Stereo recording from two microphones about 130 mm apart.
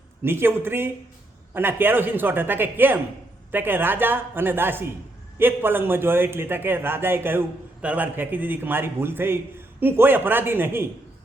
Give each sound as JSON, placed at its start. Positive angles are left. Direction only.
{"t": 0.2, "sound": "a man's voice", "side_deg": -15}